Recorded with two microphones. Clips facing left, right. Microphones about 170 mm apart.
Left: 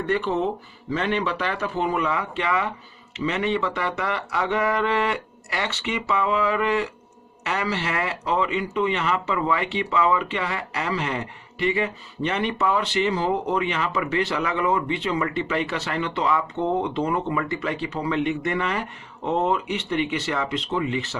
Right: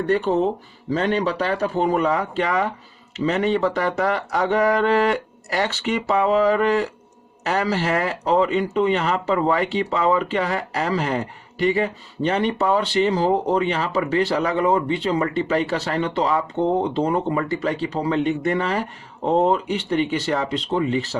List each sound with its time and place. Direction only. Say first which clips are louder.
0.0 s speech: right 4 dB; 40° right (ahead or behind)